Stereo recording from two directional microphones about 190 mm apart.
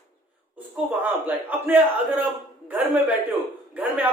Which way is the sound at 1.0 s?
10° right (ahead or behind).